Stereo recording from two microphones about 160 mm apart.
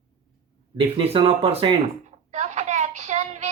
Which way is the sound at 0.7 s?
30° right (ahead or behind).